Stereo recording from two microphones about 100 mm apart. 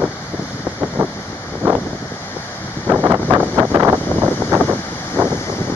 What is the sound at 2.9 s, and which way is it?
Wind noise, 20° right (ahead or behind).